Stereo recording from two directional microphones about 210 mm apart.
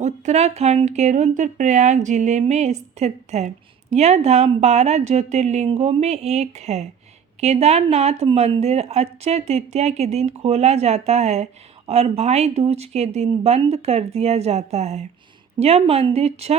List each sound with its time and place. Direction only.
0.0 s speech: 35° right (ahead or behind)